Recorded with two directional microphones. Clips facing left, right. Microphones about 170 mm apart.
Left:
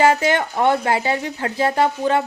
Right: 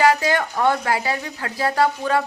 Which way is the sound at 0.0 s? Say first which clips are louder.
Left 2 dB; 25° left (ahead or behind).